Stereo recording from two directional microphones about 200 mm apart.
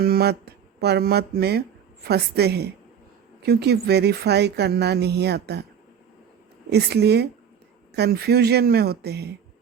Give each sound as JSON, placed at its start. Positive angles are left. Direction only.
{"t": 0.0, "sound": "speech", "side_deg": -50}
{"t": 6.7, "sound": "speech", "side_deg": -55}